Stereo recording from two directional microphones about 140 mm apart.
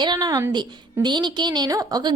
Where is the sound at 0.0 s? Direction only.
30° right (ahead or behind).